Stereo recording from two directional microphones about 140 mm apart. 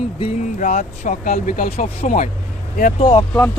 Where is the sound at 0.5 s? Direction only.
65° left (ahead or behind).